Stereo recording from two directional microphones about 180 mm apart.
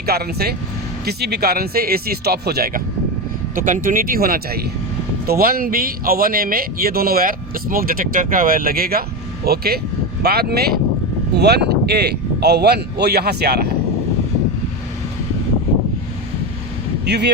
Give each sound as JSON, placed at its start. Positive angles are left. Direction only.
{"t": 0.0, "sound": "speech", "side_deg": -60}
{"t": 3.5, "sound": "speech", "side_deg": -50}
{"t": 17.1, "sound": "speech", "side_deg": -65}